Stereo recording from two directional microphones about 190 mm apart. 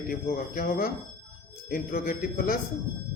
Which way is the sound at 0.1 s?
50° left (ahead or behind).